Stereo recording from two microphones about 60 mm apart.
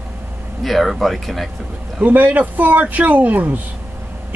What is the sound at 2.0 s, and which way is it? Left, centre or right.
A man's voice, right.